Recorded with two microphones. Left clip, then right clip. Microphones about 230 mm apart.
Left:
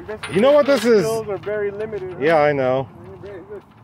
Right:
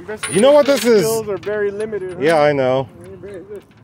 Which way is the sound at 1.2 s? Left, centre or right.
Right.